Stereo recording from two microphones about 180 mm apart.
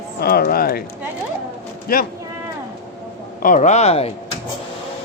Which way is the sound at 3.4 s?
45° left (ahead or behind).